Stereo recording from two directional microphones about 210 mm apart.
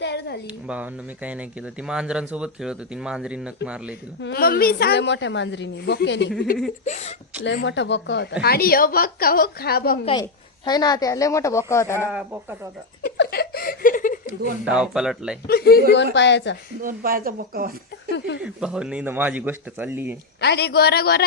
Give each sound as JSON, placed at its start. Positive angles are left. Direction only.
{"t": 0.0, "sound": "a sound", "side_deg": 55}
{"t": 0.4, "sound": "speech", "side_deg": -5}
{"t": 4.2, "sound": "a woman's voice", "side_deg": 50}
{"t": 6.8, "sound": "speech", "side_deg": 30}
{"t": 7.4, "sound": "speech", "side_deg": 60}
{"t": 10.7, "sound": "speech", "side_deg": 20}
{"t": 11.9, "sound": "speech", "side_deg": -10}
{"t": 13.1, "sound": "a sound", "side_deg": 50}
{"t": 14.6, "sound": "speech", "side_deg": -5}
{"t": 15.4, "sound": "a woman's voice", "side_deg": 45}
{"t": 16.8, "sound": "speech", "side_deg": -45}
{"t": 18.4, "sound": "speech", "side_deg": -5}
{"t": 20.4, "sound": "speech", "side_deg": 50}